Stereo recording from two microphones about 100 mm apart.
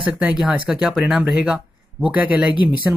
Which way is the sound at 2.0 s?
15° right (ahead or behind).